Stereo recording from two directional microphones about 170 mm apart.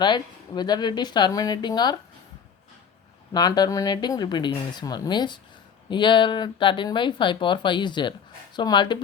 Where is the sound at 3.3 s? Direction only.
25° left (ahead or behind).